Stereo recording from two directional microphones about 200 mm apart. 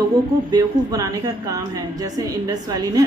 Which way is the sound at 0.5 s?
20° right (ahead or behind).